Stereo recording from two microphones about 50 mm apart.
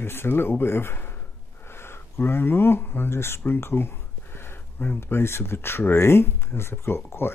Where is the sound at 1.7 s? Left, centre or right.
Left.